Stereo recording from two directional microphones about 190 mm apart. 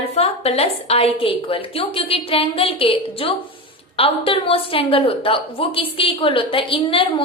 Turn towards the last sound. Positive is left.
turn(degrees=25)  # may be behind; listen again after turning